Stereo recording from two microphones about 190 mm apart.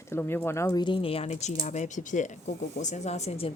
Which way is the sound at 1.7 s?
40° left (ahead or behind).